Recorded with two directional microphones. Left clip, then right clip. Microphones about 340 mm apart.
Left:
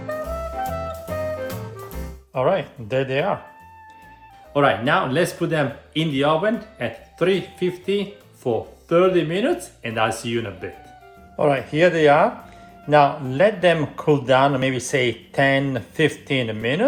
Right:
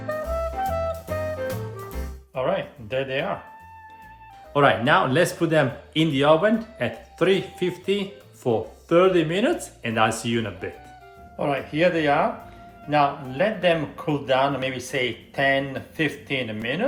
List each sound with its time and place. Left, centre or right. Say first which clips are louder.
0.0 s music: right 1 dB; centre
2.3 s speech: left 5 dB; centre
4.5 s speech: even; centre
11.3 s speech: left 5 dB; centre